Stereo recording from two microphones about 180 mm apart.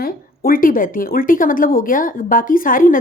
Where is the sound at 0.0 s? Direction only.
55° left (ahead or behind).